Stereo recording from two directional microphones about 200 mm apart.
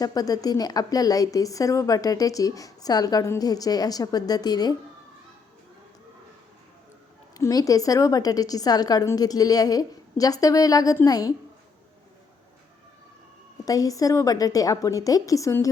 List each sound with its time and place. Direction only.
0.0 s a woman's voice: 20° left (ahead or behind)
7.3 s a woman's voice: 15° left (ahead or behind)
13.7 s a woman's voice: 15° left (ahead or behind)